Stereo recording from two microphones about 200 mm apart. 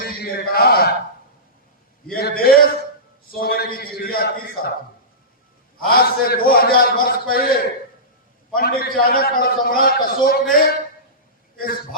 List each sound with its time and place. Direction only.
0.0 s a sound: 50° left (ahead or behind)
2.1 s a man's voice: 50° left (ahead or behind)
5.9 s a man's voice: 50° left (ahead or behind)